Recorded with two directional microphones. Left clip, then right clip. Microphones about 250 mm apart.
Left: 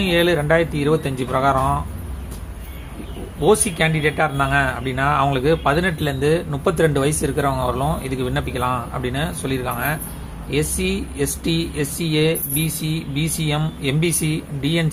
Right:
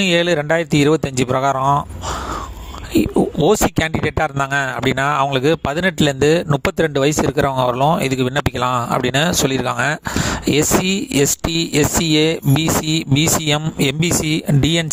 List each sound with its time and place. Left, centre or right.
0.0 s speech: right
3.4 s speech: right